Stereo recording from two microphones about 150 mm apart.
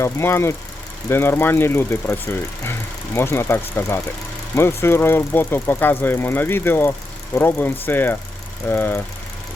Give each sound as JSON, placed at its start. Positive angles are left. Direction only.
{"t": 0.0, "sound": "speech", "side_deg": 15}